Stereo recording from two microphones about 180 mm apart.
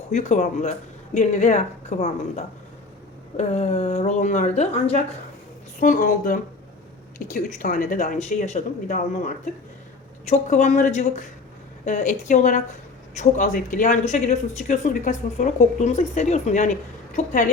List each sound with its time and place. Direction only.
0.1 s speech: 45° left (ahead or behind)
5.8 s speech: 50° left (ahead or behind)